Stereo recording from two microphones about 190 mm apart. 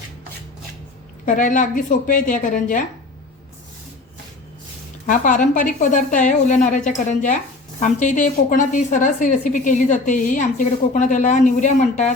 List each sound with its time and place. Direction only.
1.2 s a woman's voice: 45° left (ahead or behind)
5.0 s a woman's voice: 40° left (ahead or behind)